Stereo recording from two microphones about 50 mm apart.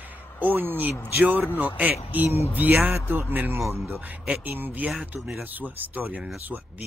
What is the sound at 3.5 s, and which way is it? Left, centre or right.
Speech, right.